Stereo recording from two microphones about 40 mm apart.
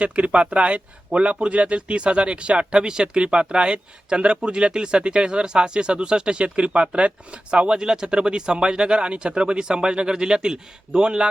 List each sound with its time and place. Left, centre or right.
0.0 s speech: right